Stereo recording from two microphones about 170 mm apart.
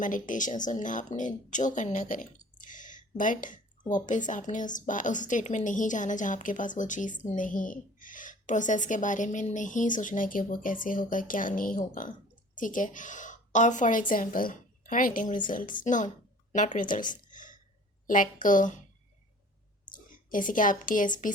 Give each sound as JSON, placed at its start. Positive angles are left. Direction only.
{"t": 0.0, "sound": "a woman's voice", "side_deg": 50}
{"t": 17.1, "sound": "a sound", "side_deg": 50}
{"t": 18.0, "sound": "speech", "side_deg": 50}
{"t": 20.1, "sound": "a woman's voice", "side_deg": 50}